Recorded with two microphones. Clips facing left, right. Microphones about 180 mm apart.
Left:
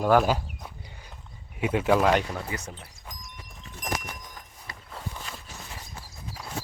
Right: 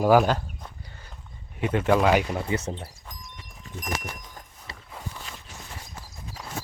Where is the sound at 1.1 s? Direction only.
5° left (ahead or behind).